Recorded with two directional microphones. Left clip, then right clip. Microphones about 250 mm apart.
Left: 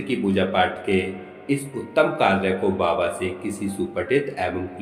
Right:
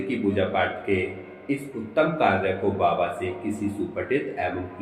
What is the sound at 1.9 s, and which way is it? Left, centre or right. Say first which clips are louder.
Speech: left 2 dB; left.